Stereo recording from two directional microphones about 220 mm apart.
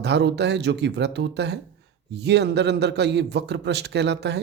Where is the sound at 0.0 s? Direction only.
50° right (ahead or behind).